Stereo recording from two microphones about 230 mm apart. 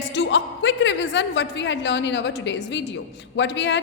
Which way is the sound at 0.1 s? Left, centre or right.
Left.